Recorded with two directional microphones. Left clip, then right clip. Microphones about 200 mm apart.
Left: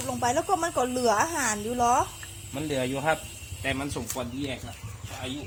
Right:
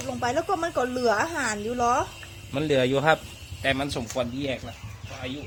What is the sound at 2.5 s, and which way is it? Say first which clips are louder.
A man's voice: right 7 dB; 55° right (ahead or behind).